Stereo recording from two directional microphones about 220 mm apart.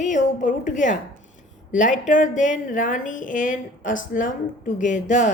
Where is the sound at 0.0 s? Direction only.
35° left (ahead or behind).